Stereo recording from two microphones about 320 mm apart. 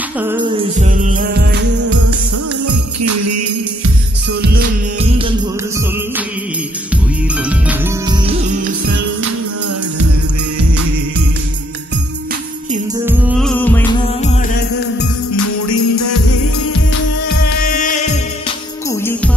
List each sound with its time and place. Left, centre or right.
0.2 s music: centre; by 1.9 s right
2.6 s music: right
6.9 s music: centre
8.3 s music: right
13.0 s music: centre
15.3 s music: left
17.5 s music: left
18.9 s music: centre